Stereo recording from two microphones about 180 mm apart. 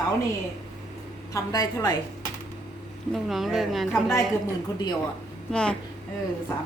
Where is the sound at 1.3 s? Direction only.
20° left (ahead or behind).